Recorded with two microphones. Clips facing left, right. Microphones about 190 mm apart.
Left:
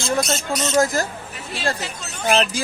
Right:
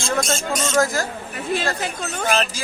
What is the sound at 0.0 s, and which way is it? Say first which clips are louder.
Speech: even; 50° right (ahead or behind).